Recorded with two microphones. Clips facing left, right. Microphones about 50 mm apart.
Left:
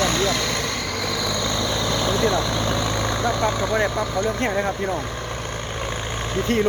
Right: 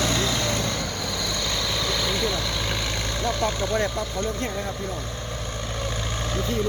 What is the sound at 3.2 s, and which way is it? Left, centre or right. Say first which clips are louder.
Speech: left 2 dB; left.